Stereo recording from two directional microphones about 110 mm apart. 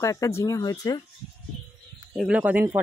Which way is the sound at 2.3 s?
15° right (ahead or behind).